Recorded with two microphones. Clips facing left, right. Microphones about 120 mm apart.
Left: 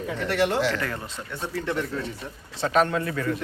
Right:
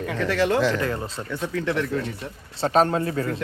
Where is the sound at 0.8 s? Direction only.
25° right (ahead or behind).